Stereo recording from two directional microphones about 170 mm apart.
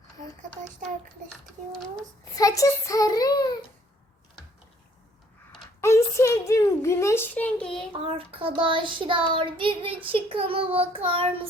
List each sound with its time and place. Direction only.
2.3 s a child's voice: 20° left (ahead or behind)
5.8 s a sound: 15° left (ahead or behind)
8.0 s child singing: 30° right (ahead or behind)